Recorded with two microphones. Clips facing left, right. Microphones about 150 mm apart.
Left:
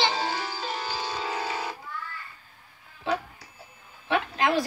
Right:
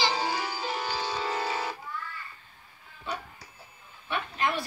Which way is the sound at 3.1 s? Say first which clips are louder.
Left 8 dB; 90° left.